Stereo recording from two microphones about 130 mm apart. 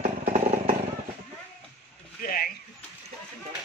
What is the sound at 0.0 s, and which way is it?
Vehicle, 90° right.